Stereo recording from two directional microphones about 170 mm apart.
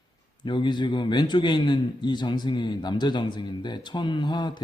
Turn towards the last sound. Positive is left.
turn(degrees=25)  # may be behind; listen again after turning